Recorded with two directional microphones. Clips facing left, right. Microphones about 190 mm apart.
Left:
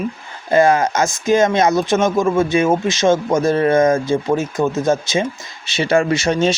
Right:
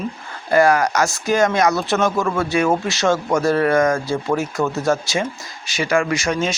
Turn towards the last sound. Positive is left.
turn(degrees=25)  # may be behind; listen again after turning